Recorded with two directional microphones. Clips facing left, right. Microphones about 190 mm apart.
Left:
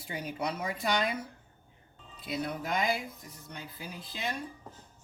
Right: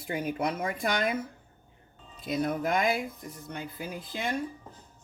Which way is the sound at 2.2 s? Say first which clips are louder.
Right 6 dB; 45° right (ahead or behind).